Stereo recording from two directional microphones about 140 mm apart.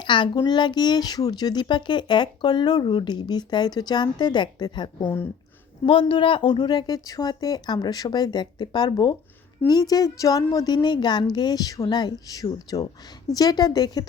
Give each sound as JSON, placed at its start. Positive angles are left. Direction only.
{"t": 0.0, "sound": "speech", "side_deg": 35}
{"t": 5.0, "sound": "speech", "side_deg": 15}
{"t": 5.8, "sound": "a woman's voice", "side_deg": 40}